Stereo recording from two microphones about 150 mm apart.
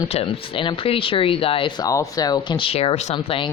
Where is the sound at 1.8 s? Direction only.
25° left (ahead or behind); by 3.1 s 45° left (ahead or behind).